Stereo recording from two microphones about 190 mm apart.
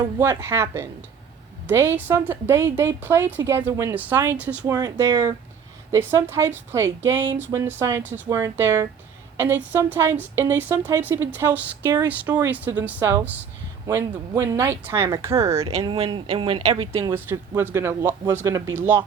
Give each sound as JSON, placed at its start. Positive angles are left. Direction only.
{"t": 0.2, "sound": "a woman's voice", "side_deg": -10}
{"t": 4.6, "sound": "a woman's voice", "side_deg": -15}
{"t": 16.9, "sound": "a woman's voice", "side_deg": -15}